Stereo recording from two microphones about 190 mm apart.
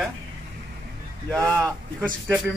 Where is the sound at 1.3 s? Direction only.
15° right (ahead or behind).